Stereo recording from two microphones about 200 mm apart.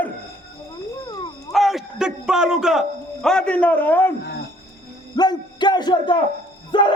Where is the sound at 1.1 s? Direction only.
25° left (ahead or behind).